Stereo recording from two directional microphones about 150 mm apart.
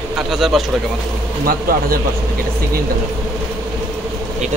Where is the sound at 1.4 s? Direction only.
75° right (ahead or behind).